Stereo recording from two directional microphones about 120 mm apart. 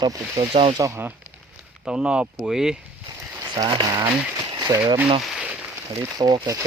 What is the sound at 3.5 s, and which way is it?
Speech, 40° right (ahead or behind).